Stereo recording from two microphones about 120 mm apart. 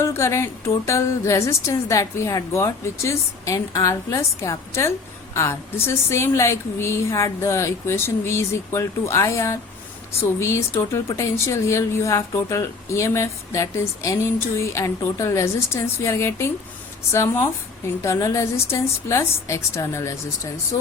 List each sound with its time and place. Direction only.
0.0 s a woman's voice: 25° left (ahead or behind)